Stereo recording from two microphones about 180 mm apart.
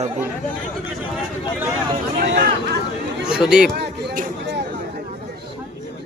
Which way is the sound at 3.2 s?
5° right (ahead or behind).